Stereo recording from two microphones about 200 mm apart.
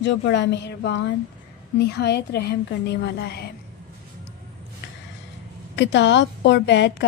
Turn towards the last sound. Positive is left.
turn(degrees=60)  # may be behind; listen again after turning